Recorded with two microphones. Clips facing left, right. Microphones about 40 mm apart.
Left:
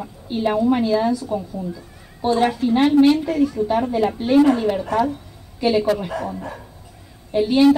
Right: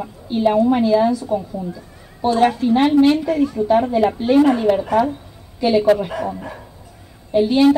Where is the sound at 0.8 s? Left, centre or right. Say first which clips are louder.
Right 4 dB; right.